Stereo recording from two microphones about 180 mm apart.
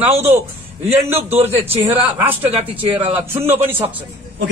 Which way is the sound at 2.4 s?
30° right (ahead or behind).